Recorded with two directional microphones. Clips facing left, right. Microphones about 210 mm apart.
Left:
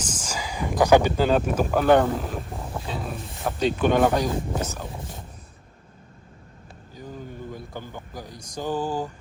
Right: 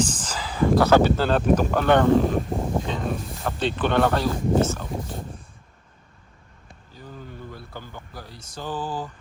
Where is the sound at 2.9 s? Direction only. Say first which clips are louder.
Right 4 dB; 5° left (ahead or behind).